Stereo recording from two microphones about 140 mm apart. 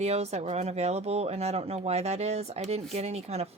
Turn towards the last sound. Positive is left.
turn(degrees=-50)  # may be behind; listen again after turning